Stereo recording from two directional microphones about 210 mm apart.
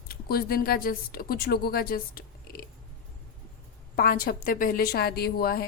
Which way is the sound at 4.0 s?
45° left (ahead or behind).